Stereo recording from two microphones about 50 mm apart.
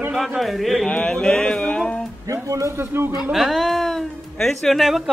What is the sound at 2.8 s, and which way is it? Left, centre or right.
Speech, right.